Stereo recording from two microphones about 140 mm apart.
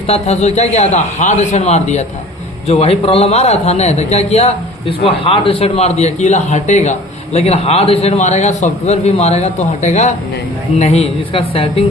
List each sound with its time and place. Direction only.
0.1 s a man's voice: 50° left (ahead or behind)